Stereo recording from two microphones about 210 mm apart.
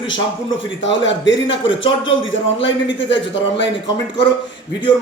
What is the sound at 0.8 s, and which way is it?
A man's voice, 60° left (ahead or behind).